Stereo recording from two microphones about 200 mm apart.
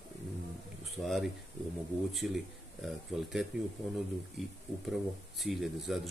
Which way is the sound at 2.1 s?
Centre (ahead or behind).